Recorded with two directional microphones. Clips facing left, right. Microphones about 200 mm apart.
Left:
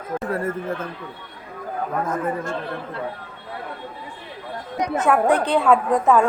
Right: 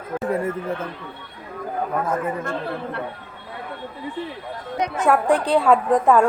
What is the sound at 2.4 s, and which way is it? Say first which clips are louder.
Speech: right 1 dB; 60° right (ahead or behind).